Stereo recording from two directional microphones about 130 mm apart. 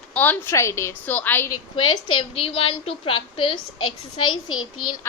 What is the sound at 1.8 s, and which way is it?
A woman's voice, 40° left (ahead or behind).